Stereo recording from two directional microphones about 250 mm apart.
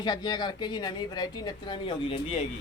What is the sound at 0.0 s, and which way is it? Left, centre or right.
A woman's voice, centre.